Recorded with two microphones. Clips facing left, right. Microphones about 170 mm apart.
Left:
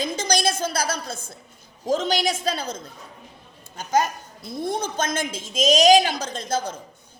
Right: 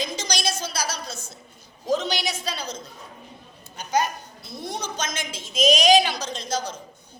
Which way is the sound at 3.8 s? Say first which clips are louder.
Left 2 dB; 45° left (ahead or behind).